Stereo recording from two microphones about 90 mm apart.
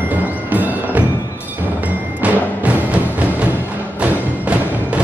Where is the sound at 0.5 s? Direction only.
20° right (ahead or behind).